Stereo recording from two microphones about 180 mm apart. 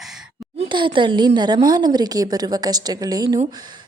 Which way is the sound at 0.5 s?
25° right (ahead or behind).